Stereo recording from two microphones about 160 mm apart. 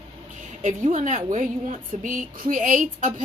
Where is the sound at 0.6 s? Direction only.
50° right (ahead or behind).